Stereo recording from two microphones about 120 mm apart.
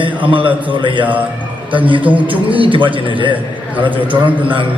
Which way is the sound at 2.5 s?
45° right (ahead or behind).